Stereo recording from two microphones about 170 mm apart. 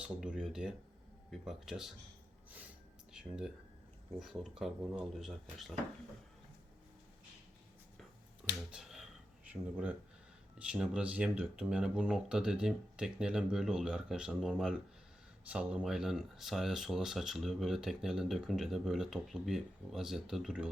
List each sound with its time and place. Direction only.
0.0 s speech: 5° right (ahead or behind)
3.1 s speech: 5° right (ahead or behind)
8.7 s finger snapping: 5° right (ahead or behind)
9.5 s speech: 5° right (ahead or behind)